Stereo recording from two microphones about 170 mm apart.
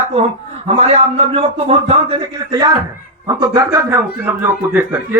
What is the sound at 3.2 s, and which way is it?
Speech, 20° right (ahead or behind).